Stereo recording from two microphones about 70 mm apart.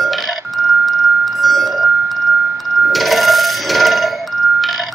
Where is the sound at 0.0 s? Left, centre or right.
Centre.